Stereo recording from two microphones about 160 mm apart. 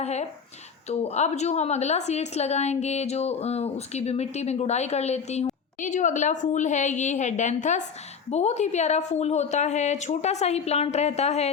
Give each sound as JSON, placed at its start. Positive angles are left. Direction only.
{"t": 0.0, "sound": "a woman's voice", "side_deg": 45}